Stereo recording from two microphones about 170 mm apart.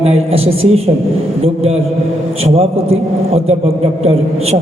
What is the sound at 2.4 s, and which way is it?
A man's voice, 35° right (ahead or behind).